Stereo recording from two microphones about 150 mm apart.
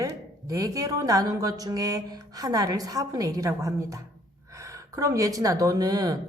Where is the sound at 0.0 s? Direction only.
25° right (ahead or behind).